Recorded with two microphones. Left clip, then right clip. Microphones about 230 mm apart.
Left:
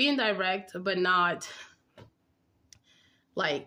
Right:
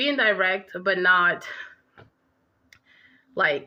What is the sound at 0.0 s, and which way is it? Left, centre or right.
A woman's voice, centre.